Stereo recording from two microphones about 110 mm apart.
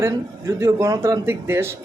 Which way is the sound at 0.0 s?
25° right (ahead or behind).